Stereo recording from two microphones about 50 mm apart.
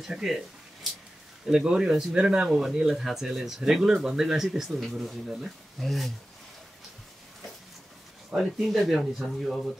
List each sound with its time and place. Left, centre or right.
0.0 s speech: centre
1.4 s speech: centre
5.8 s speech: centre
8.4 s speech: centre